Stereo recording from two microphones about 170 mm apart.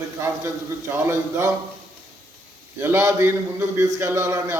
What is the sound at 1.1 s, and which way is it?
Speech, 20° right (ahead or behind).